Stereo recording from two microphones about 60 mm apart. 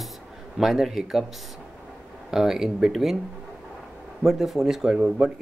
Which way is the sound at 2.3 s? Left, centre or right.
Centre.